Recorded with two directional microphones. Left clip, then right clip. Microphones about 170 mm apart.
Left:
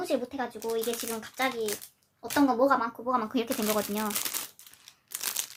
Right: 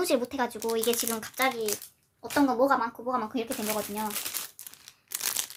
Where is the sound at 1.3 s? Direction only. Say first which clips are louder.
Right 2 dB; 15° right (ahead or behind).